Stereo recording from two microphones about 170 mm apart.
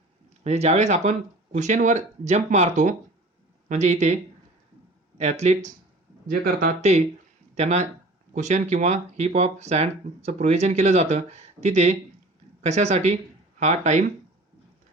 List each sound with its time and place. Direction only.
0.4 s speech: 40° right (ahead or behind)
6.2 s speech: 55° right (ahead or behind)